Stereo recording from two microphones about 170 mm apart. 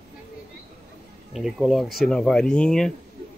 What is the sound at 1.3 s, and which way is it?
Speech, centre (ahead or behind).